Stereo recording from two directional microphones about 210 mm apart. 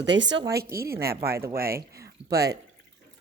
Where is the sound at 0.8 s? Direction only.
45° right (ahead or behind).